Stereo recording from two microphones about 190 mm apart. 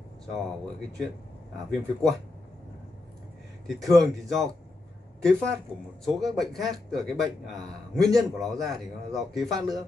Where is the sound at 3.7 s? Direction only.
Centre (ahead or behind).